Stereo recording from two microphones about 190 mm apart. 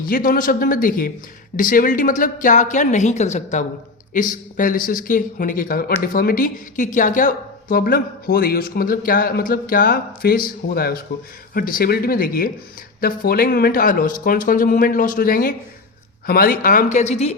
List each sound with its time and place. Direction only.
0.0 s a woman's voice: 45° left (ahead or behind)